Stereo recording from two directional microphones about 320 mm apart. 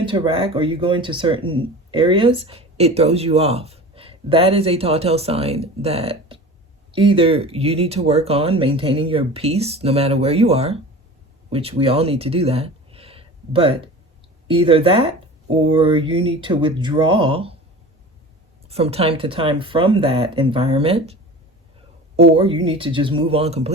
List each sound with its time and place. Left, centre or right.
0.0 s speech: centre
18.7 s speech: centre